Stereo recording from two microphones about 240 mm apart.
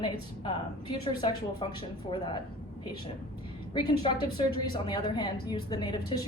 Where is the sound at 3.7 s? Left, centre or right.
Centre.